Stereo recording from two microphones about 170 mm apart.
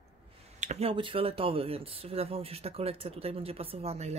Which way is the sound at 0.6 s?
40° right (ahead or behind).